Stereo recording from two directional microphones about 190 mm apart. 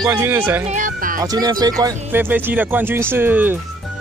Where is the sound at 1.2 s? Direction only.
20° right (ahead or behind).